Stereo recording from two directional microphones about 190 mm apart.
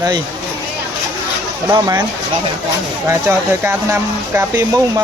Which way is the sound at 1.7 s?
20° right (ahead or behind).